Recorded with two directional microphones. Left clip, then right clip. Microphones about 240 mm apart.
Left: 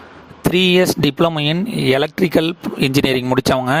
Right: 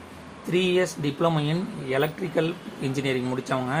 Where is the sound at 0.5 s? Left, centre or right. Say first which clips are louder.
Left 9 dB; left.